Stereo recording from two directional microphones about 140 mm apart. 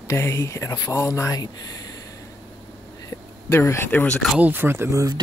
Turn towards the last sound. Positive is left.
turn(degrees=-20)  # may be behind; listen again after turning